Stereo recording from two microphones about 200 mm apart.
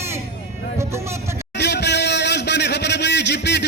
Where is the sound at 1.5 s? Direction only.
60° left (ahead or behind).